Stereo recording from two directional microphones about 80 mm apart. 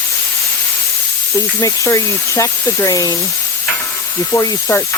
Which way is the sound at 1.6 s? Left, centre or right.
Left.